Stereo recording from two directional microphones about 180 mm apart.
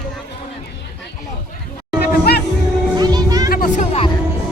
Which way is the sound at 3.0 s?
20° right (ahead or behind).